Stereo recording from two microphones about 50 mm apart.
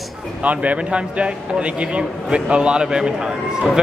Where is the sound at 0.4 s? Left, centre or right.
Right.